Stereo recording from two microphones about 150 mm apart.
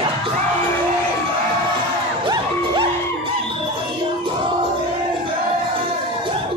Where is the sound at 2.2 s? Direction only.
30° right (ahead or behind).